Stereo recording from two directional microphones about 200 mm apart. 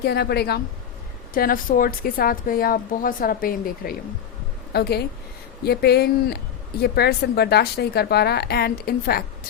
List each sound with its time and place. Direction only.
0.0 s a woman's voice: 55° left (ahead or behind)